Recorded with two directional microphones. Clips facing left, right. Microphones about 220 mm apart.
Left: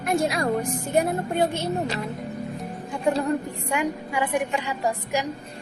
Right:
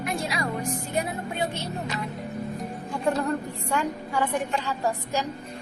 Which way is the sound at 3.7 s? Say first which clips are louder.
Left 2 dB; 15° left (ahead or behind).